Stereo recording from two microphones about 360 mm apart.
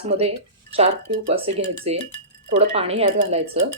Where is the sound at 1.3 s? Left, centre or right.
Centre.